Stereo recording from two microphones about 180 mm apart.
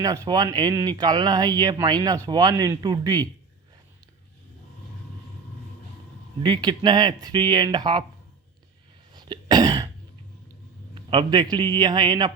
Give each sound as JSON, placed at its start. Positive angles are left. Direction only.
{"t": 0.0, "sound": "speech", "side_deg": -20}
{"t": 6.4, "sound": "speech", "side_deg": -25}
{"t": 9.1, "sound": "cough", "side_deg": -25}
{"t": 10.9, "sound": "speech", "side_deg": -25}